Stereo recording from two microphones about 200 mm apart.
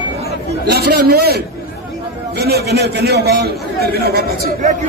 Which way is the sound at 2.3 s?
55° right (ahead or behind).